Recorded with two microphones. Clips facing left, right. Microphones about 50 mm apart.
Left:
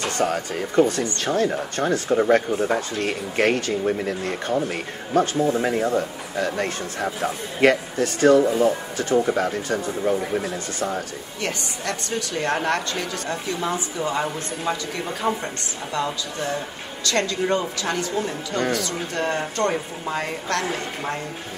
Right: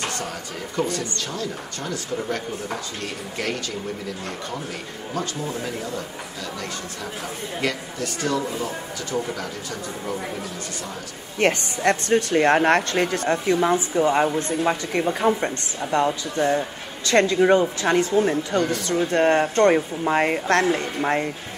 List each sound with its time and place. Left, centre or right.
0.2 s a man's voice: left
11.3 s speech: right
18.6 s speech: left
19.1 s speech: right